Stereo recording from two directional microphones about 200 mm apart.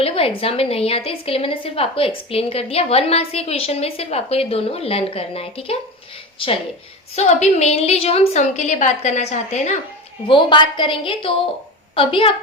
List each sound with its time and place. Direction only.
0.0 s a woman's voice: 30° left (ahead or behind)
7.2 s a woman's voice: 35° left (ahead or behind)
10.2 s a woman's voice: 25° left (ahead or behind)